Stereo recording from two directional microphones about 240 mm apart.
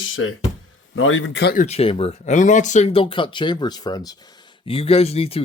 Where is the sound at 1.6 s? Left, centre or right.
Left.